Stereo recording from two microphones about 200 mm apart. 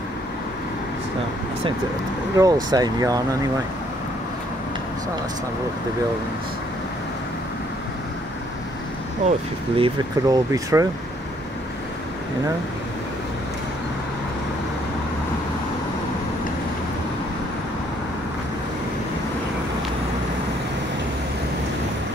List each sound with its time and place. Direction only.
2.3 s speech: 20° right (ahead or behind)
9.2 s speech: 35° right (ahead or behind)
9.8 s speech: 25° right (ahead or behind)